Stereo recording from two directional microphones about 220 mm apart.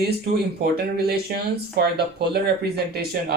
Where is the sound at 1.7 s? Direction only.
45° right (ahead or behind).